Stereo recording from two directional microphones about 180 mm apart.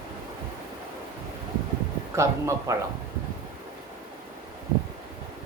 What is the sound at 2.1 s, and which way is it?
Speech, 15° right (ahead or behind).